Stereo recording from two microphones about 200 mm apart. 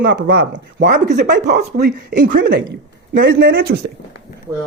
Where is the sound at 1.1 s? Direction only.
55° right (ahead or behind).